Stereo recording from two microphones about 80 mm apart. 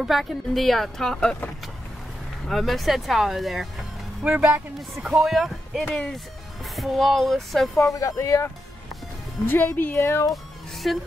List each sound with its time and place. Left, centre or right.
0.0 s speech: centre
2.4 s speech: centre
4.2 s speech: centre
4.7 s speech: centre
7.8 s speech: left
9.5 s speech: left
10.3 s music: centre